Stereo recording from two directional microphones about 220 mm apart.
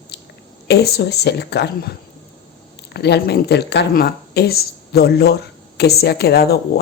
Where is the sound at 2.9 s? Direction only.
50° left (ahead or behind).